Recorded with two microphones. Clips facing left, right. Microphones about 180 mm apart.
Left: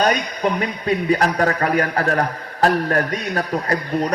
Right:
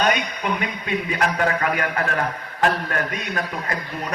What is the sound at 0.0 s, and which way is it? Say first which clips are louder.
Speech: left 3 dB; 35° left (ahead or behind).